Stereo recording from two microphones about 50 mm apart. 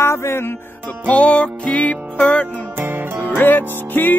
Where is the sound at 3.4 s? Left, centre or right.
Left.